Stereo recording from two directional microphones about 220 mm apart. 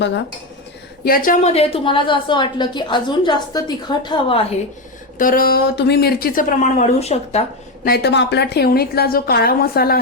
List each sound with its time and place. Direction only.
1.0 s a woman's voice: 40° left (ahead or behind); by 4.4 s 25° left (ahead or behind)
5.1 s speech: 40° left (ahead or behind)
7.9 s a woman's voice: 50° left (ahead or behind)